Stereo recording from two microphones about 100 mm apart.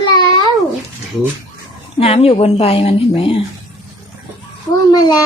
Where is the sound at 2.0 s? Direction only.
75° left (ahead or behind).